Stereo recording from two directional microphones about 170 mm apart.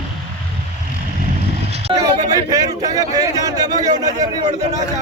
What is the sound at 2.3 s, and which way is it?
A man's voice, 20° right (ahead or behind).